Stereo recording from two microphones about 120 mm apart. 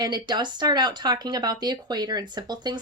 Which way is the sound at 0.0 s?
35° right (ahead or behind).